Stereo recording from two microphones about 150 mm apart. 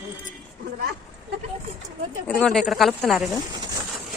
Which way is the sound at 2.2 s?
5° left (ahead or behind).